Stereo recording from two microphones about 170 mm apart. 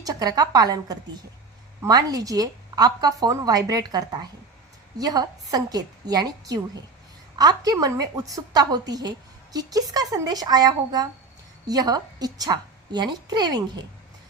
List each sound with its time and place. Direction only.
0.0 s a woman's voice: 20° right (ahead or behind)